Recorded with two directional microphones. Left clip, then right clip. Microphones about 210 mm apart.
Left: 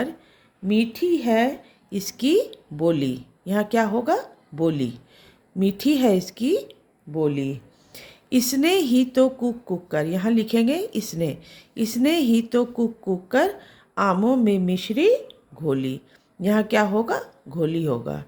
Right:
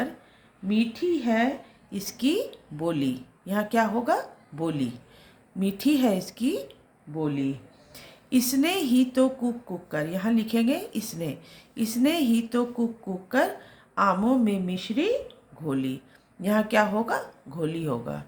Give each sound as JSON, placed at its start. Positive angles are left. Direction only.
{"t": 0.7, "sound": "speech", "side_deg": 50}